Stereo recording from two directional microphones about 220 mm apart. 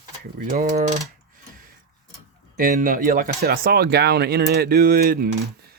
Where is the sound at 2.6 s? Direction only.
40° right (ahead or behind).